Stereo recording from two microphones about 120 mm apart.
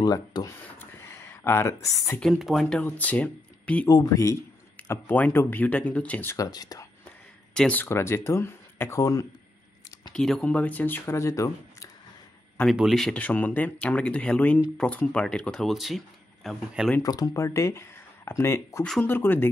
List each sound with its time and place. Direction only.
0.0 s speech: 35° left (ahead or behind)
0.7 s a sound: 15° left (ahead or behind)
2.1 s speech: centre (ahead or behind)
3.9 s speech: 30° left (ahead or behind); by 6.3 s 10° left (ahead or behind)
6.3 s speech: 30° left (ahead or behind)
7.1 s speech: 10° left (ahead or behind); by 9.2 s 25° left (ahead or behind)
10.1 s speech: 5° left (ahead or behind); by 11.9 s 25° left (ahead or behind)
12.7 s speech: centre (ahead or behind)
13.2 s speech: 15° left (ahead or behind); by 16.9 s centre (ahead or behind)
17.0 s speech: 30° left (ahead or behind)